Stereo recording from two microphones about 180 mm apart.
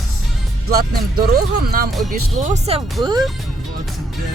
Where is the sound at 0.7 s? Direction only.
60° right (ahead or behind).